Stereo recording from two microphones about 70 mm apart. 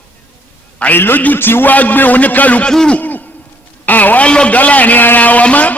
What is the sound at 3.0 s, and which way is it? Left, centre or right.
Hoot, left.